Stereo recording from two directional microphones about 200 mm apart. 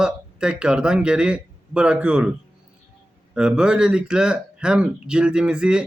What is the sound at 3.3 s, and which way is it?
A man's voice, 5° right (ahead or behind).